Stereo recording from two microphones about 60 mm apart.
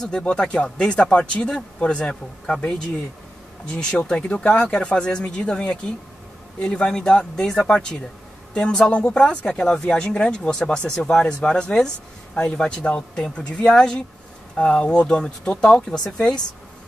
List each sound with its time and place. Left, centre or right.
0.3 s speech: centre
3.9 s speech: centre